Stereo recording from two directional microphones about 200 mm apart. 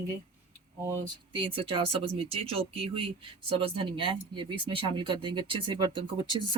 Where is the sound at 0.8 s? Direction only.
15° right (ahead or behind).